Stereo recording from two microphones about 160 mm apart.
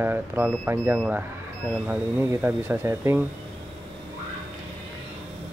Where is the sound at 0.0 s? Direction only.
15° right (ahead or behind).